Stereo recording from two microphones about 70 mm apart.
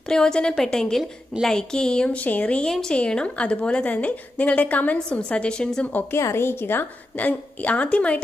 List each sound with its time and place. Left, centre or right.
0.1 s a woman's voice: centre
2.2 s a woman's voice: left
2.6 s a woman's voice: centre
6.1 s a woman's voice: left; by 8.2 s centre